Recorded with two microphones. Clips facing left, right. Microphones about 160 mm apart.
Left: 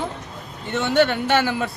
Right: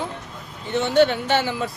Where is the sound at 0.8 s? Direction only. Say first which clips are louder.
Right 1 dB; 60° left (ahead or behind).